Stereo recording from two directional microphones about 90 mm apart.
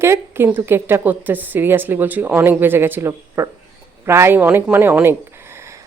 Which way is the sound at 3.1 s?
35° right (ahead or behind).